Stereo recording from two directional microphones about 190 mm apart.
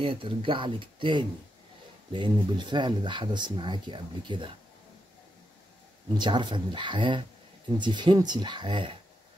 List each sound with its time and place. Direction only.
0.0 s speech: 30° right (ahead or behind)
6.1 s speech: 25° right (ahead or behind)